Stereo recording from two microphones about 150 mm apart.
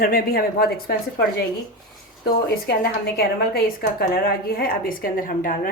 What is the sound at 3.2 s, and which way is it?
A woman's voice, 90° left.